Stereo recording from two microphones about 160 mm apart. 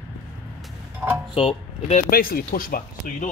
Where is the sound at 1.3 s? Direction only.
40° left (ahead or behind).